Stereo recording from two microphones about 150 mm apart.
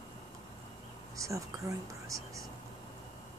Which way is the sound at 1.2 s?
20° right (ahead or behind).